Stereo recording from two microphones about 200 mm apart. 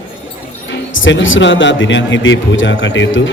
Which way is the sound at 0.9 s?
70° left (ahead or behind).